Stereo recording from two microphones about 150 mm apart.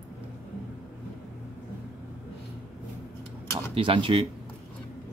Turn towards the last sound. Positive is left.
turn(degrees=-35)  # may be behind; listen again after turning